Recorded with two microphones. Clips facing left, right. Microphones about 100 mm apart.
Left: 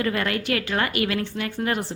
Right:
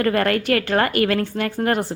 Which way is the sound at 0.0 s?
50° right (ahead or behind).